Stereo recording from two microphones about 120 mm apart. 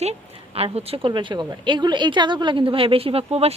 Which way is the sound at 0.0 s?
60° right (ahead or behind).